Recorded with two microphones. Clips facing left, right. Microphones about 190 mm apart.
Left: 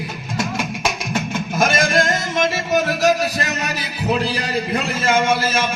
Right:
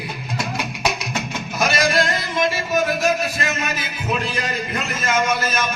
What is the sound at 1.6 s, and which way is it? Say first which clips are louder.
Music: left 1 dB; 50° left (ahead or behind).